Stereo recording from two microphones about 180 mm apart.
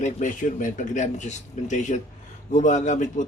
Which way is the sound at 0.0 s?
45° left (ahead or behind).